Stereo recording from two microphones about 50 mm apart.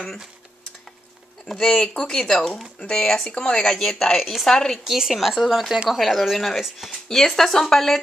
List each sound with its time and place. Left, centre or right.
1.4 s speech: centre
4.2 s speech: centre